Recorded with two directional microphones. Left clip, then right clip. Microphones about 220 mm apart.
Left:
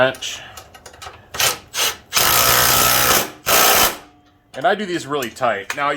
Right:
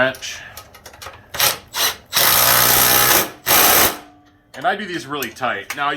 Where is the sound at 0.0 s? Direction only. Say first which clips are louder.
Left 1 dB; 40° left (ahead or behind).